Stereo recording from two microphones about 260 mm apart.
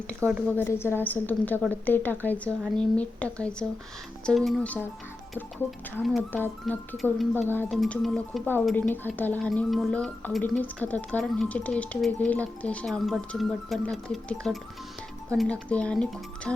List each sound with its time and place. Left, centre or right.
0.2 s a woman's voice: centre
6.0 s speech: centre